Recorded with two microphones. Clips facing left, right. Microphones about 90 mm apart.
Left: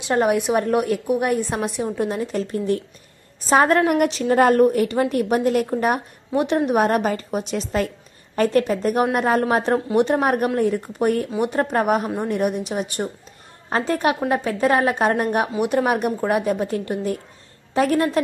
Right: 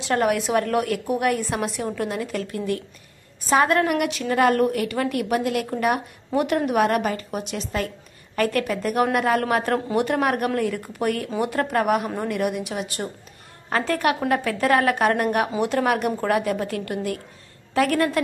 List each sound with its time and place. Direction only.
0.0 s a woman's voice: 20° left (ahead or behind)
6.3 s a woman's voice: 20° left (ahead or behind)